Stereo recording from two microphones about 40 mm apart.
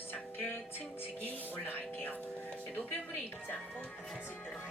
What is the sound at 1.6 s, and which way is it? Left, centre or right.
Speech, left.